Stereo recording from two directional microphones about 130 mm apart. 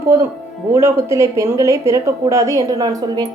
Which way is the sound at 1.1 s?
25° right (ahead or behind).